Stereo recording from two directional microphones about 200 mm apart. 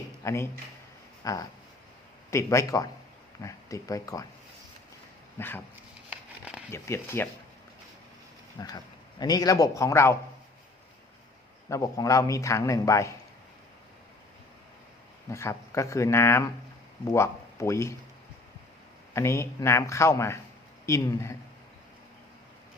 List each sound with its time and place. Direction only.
0.3 s a man's voice: 15° left (ahead or behind)
1.2 s a sound: 15° left (ahead or behind)
2.3 s a man's voice: 15° left (ahead or behind)
5.4 s a man's voice: 10° left (ahead or behind)
5.7 s a sound: 5° right (ahead or behind)
6.7 s a man's voice: 15° left (ahead or behind)
8.5 s a man's voice: 20° left (ahead or behind)
11.7 s a man's voice: 15° left (ahead or behind)
15.3 s a man's voice: 15° left (ahead or behind)
19.1 s a man's voice: 15° left (ahead or behind)